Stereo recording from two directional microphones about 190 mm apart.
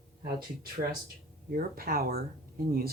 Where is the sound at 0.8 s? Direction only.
50° right (ahead or behind).